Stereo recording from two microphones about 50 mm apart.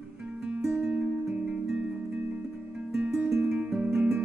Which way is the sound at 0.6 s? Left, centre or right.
Centre.